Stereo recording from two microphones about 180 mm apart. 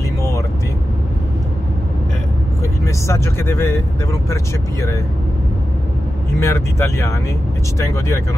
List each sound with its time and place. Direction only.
2.8 s speech: 15° left (ahead or behind)
6.4 s speech: 15° left (ahead or behind)